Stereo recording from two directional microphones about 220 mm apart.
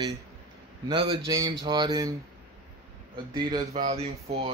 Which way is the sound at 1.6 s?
20° right (ahead or behind).